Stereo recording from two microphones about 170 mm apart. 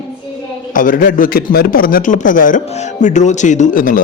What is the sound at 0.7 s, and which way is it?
A man's voice, 55° left (ahead or behind).